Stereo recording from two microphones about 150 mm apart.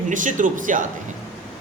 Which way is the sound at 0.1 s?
60° right (ahead or behind).